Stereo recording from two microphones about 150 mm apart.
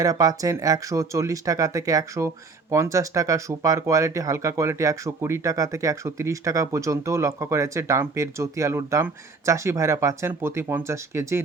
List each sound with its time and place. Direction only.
0.0 s speech: 25° right (ahead or behind)